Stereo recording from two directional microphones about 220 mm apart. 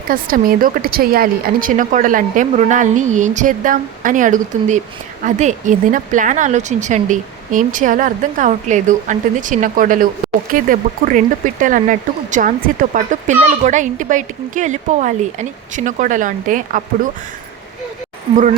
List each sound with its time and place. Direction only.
0.1 s speech: 40° right (ahead or behind)